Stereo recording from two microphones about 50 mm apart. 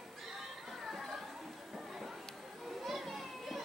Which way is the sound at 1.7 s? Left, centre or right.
Centre.